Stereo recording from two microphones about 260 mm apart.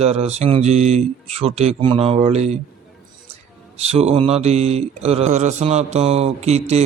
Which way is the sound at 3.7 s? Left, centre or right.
Right.